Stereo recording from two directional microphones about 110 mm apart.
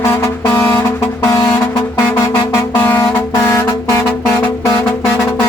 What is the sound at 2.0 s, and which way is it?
Music, 40° left (ahead or behind).